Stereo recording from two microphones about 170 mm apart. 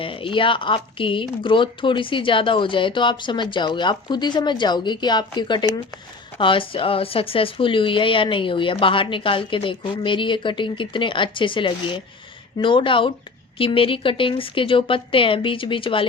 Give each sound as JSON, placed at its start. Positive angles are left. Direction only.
{"t": 0.0, "sound": "speech", "side_deg": 30}